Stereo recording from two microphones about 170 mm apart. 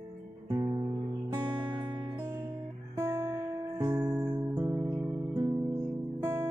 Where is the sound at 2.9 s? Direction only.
15° right (ahead or behind).